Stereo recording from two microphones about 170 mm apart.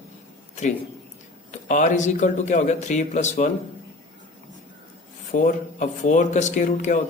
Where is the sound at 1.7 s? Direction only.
45° left (ahead or behind).